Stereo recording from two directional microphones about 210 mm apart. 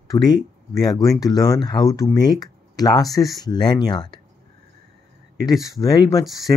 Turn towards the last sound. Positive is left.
turn(degrees=15)  # may be behind; listen again after turning